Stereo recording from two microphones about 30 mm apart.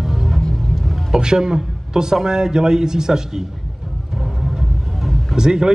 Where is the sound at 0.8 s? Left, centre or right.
Centre.